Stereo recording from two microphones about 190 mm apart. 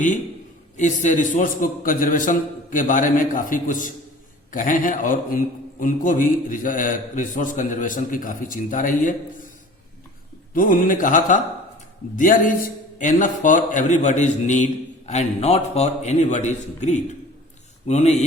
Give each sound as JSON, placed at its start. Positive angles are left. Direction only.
{"t": 0.8, "sound": "a man's voice", "side_deg": 40}
{"t": 10.5, "sound": "a man's voice", "side_deg": 45}